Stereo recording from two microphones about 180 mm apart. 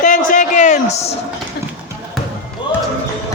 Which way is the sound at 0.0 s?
45° left (ahead or behind).